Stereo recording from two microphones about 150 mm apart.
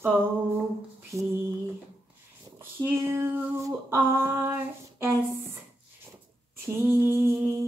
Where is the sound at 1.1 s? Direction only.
20° right (ahead or behind).